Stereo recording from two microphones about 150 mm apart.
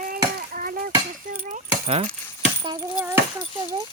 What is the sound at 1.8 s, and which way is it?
Speech, 40° right (ahead or behind).